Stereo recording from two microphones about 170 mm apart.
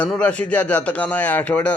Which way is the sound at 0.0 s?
10° left (ahead or behind).